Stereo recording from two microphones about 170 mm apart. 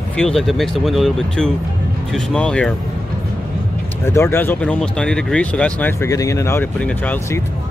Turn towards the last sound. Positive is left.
turn(degrees=10)  # may be behind; listen again after turning